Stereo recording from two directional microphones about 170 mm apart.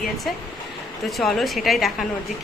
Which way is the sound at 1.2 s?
Centre (ahead or behind).